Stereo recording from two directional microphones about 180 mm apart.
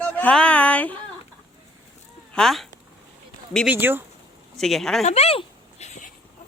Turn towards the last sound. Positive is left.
turn(degrees=40)  # may be behind; listen again after turning